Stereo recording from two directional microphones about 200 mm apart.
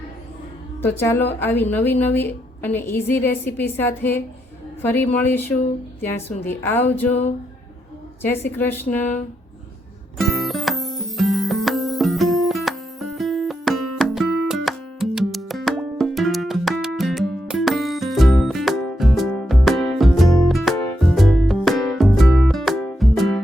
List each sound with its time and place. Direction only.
0.8 s a woman's voice: 10° left (ahead or behind)
7.1 s a sound: 35° left (ahead or behind)
8.4 s a woman's voice: 10° left (ahead or behind)
10.2 s music: centre (ahead or behind)